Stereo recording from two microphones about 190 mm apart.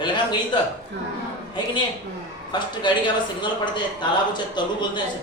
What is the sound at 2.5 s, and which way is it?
Speech, 25° left (ahead or behind).